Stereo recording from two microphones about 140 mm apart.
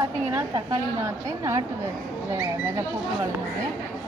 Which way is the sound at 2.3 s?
20° right (ahead or behind).